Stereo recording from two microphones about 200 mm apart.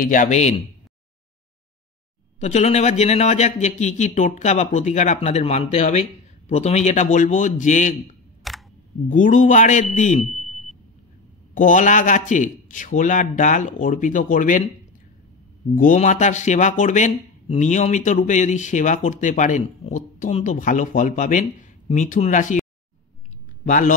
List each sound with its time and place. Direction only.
0.0 s speech: 40° left (ahead or behind)
2.4 s speech: 35° left (ahead or behind)
8.5 s camera: centre (ahead or behind)
9.1 s speech: 40° left (ahead or behind)
10.3 s a sound: centre (ahead or behind)
11.5 s speech: 40° left (ahead or behind)
15.7 s speech: 40° left (ahead or behind)
23.6 s speech: 40° left (ahead or behind)